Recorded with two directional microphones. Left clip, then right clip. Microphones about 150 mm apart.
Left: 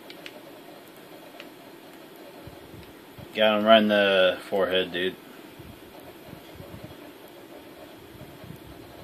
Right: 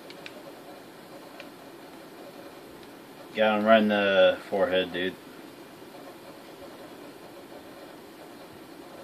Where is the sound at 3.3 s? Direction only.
25° left (ahead or behind).